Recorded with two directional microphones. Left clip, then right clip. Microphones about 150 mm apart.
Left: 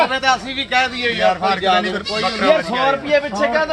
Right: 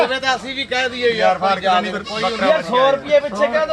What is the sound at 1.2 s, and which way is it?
Speech, 10° right (ahead or behind).